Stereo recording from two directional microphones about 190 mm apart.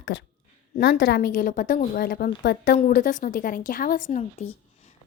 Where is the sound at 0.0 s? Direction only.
60° left (ahead or behind).